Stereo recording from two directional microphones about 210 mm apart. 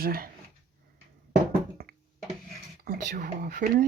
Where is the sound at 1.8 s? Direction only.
45° right (ahead or behind).